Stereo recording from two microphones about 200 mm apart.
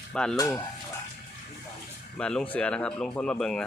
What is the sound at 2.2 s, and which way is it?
Speech, 5° left (ahead or behind).